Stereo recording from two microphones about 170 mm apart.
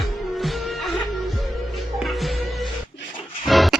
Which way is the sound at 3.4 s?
Centre (ahead or behind).